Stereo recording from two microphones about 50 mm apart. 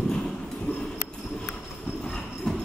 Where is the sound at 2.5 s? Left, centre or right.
Centre.